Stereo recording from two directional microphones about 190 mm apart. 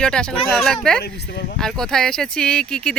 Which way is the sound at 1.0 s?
65° left (ahead or behind).